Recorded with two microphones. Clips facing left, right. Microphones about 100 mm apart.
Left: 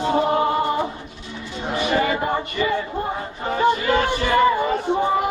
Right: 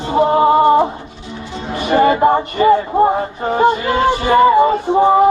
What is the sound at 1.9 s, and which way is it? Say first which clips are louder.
Music: right 11 dB; 45° right (ahead or behind).